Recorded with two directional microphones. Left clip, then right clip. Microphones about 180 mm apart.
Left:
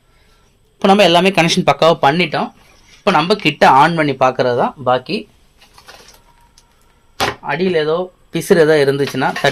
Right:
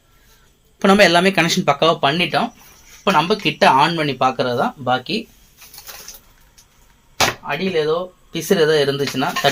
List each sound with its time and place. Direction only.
0.8 s speech: 20° left (ahead or behind)
1.8 s speech: 45° left (ahead or behind)
7.4 s speech: 55° left (ahead or behind)